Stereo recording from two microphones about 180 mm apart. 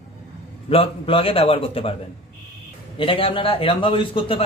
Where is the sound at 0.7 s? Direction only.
30° left (ahead or behind).